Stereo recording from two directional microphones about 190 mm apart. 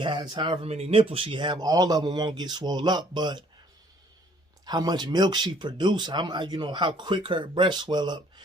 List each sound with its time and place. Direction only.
0.0 s speech: 25° right (ahead or behind)
4.6 s speech: 20° right (ahead or behind)